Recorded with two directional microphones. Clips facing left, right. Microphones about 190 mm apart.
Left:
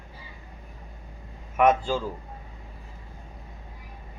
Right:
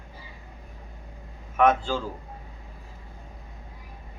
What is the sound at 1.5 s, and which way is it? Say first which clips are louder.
Speech: even; 10° left (ahead or behind).